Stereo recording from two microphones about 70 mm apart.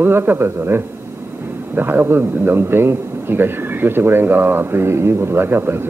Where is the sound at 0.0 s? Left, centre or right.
Right.